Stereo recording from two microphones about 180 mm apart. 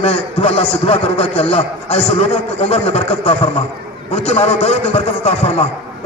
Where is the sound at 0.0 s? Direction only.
35° left (ahead or behind).